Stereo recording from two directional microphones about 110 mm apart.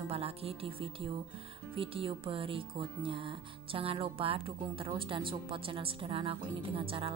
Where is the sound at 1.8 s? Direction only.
55° right (ahead or behind).